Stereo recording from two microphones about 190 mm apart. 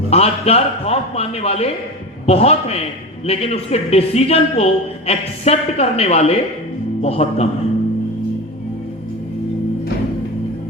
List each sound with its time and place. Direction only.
0.1 s a man's voice: 30° left (ahead or behind)